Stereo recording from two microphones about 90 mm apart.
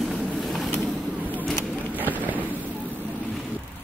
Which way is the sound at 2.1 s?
20° right (ahead or behind).